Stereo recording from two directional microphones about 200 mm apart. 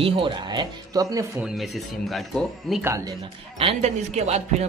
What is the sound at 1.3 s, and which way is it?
Speech, centre (ahead or behind).